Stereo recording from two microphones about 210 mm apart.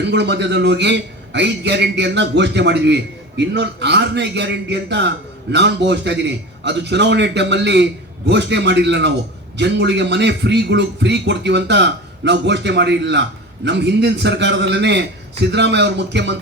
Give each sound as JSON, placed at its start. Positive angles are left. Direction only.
{"t": 0.0, "sound": "a man's voice", "side_deg": -55}